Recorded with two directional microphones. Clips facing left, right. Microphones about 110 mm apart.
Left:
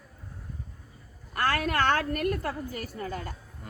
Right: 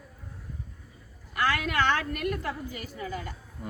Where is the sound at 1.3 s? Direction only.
45° left (ahead or behind).